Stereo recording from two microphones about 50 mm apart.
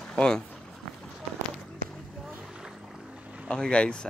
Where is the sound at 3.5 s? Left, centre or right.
Centre.